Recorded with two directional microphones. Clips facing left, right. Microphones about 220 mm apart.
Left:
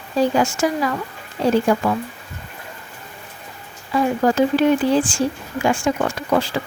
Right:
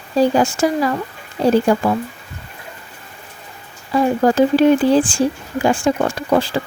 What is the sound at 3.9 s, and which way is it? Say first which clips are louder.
Speech: right 3 dB; 35° right (ahead or behind).